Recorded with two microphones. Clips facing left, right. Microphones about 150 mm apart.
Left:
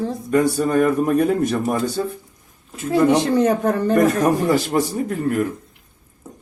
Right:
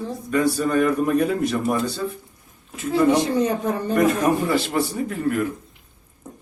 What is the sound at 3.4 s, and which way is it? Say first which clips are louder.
Speech: left 5 dB; 60° left (ahead or behind).